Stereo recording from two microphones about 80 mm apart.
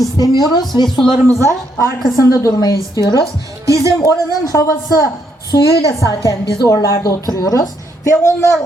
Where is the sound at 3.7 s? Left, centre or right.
Right.